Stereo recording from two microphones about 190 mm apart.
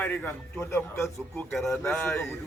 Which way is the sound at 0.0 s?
10° left (ahead or behind).